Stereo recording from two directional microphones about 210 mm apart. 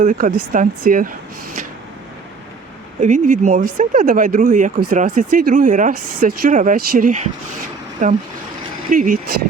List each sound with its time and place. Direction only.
0.0 s speech: 40° right (ahead or behind)
3.0 s speech: 35° right (ahead or behind)